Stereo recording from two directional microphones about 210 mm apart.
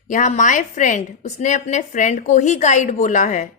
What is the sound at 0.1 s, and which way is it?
A woman's voice, 35° left (ahead or behind).